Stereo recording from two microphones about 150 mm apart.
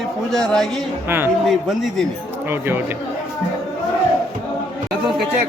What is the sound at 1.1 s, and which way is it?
Speech, 15° right (ahead or behind).